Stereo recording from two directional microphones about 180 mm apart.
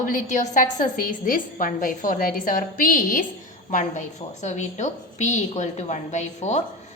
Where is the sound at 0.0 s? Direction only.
45° left (ahead or behind).